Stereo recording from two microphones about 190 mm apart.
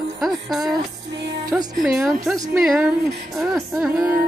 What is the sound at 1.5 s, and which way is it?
A woman's voice, 10° right (ahead or behind).